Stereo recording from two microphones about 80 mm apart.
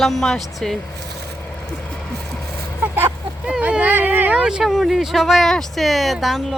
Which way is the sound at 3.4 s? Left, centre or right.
Centre.